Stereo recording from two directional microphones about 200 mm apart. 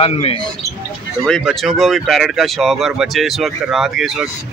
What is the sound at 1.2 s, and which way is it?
Speech, centre (ahead or behind).